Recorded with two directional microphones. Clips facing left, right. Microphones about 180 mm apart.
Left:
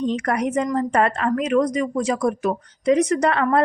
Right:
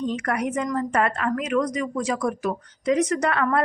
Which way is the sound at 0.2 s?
30° left (ahead or behind).